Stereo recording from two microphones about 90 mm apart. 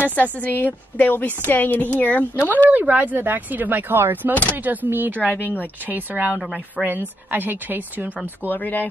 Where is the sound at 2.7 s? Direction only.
20° right (ahead or behind).